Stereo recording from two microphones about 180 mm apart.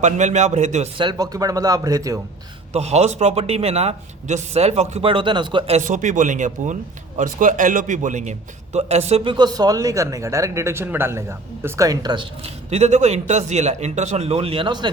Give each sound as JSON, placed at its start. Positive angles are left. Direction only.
{"t": 0.0, "sound": "a man's voice", "side_deg": -40}
{"t": 0.9, "sound": "speech", "side_deg": -25}
{"t": 2.7, "sound": "a man's voice", "side_deg": -35}